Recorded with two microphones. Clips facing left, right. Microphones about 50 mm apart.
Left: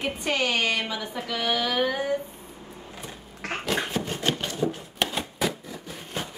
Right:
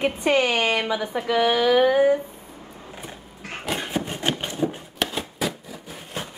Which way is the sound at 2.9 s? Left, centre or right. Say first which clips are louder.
Right 2 dB; centre.